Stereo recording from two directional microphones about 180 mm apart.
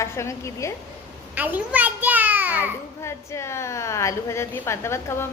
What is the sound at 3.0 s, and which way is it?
A woman's voice, 15° left (ahead or behind).